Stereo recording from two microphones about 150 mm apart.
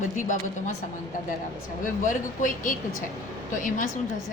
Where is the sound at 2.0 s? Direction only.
60° left (ahead or behind).